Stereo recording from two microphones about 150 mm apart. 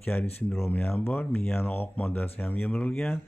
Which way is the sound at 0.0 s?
10° left (ahead or behind).